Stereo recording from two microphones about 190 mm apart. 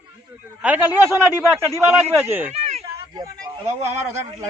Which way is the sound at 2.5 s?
35° right (ahead or behind).